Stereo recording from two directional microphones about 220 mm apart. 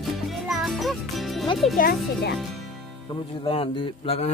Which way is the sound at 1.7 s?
40° left (ahead or behind).